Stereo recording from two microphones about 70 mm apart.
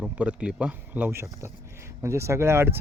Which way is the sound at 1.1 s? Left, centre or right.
Right.